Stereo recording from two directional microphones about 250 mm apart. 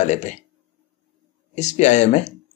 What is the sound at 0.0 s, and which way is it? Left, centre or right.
Speech, left.